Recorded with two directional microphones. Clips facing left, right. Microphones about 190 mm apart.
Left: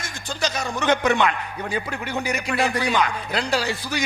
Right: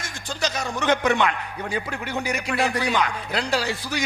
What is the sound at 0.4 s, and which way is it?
Speech, 20° left (ahead or behind).